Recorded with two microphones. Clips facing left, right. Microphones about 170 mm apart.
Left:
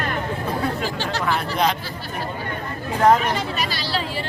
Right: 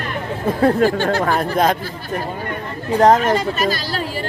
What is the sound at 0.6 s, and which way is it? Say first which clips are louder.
Speech: right 10 dB; 55° right (ahead or behind).